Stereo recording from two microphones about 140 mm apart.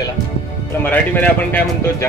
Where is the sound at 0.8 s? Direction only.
10° left (ahead or behind).